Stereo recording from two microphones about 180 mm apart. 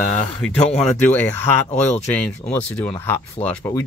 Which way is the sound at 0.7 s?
5° left (ahead or behind).